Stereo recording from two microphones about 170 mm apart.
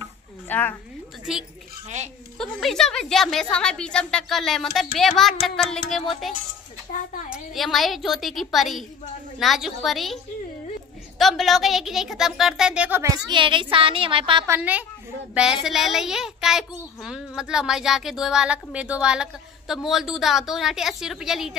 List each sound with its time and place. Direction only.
0.5 s speech: 10° left (ahead or behind)
2.3 s a child's voice: 5° left (ahead or behind)
11.1 s a child's voice: centre (ahead or behind)
13.3 s speech: 30° right (ahead or behind)
14.5 s a woman's voice: 10° right (ahead or behind)